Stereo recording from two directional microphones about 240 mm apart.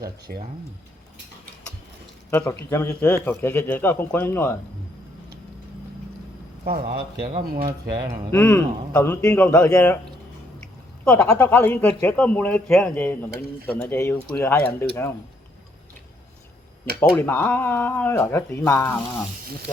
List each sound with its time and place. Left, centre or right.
0.3 s a man's voice: right
2.3 s speech: centre
6.7 s a man's voice: right
7.3 s speech: right
8.3 s speech: centre
11.0 s speech: centre
17.0 s speech: centre